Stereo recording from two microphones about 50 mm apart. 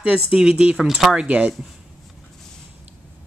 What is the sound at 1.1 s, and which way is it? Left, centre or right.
Speech, right.